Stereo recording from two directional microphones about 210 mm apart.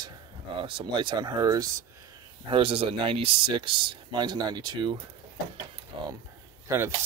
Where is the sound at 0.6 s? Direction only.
25° right (ahead or behind).